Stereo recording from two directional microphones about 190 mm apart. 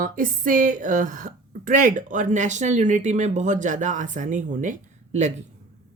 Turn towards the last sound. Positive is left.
turn(degrees=-40)  # may be behind; listen again after turning